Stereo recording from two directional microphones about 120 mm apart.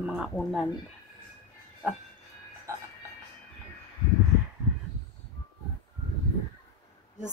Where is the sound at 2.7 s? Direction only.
25° right (ahead or behind).